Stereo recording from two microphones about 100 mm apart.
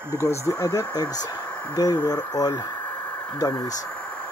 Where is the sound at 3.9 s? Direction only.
10° left (ahead or behind).